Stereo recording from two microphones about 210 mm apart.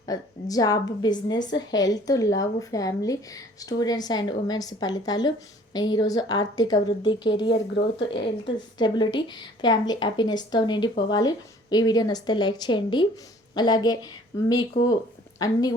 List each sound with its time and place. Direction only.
0.0 s a woman's voice: 15° left (ahead or behind)
7.5 s speech: 50° left (ahead or behind)
8.1 s a woman's voice: 25° left (ahead or behind)